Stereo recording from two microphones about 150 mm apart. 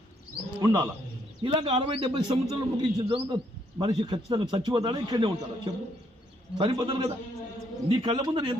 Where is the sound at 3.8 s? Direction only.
30° right (ahead or behind).